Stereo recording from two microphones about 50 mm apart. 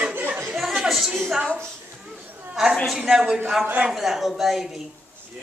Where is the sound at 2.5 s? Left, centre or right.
Centre.